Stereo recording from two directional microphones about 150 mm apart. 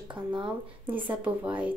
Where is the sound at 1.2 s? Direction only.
10° right (ahead or behind).